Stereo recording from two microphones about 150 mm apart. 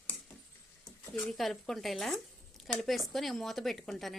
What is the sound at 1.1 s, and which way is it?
Speech, centre (ahead or behind).